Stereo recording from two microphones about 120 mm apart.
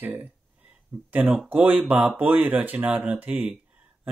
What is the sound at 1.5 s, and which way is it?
Speech, 15° right (ahead or behind).